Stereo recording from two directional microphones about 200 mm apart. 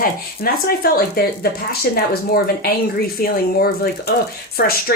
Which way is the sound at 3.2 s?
50° left (ahead or behind).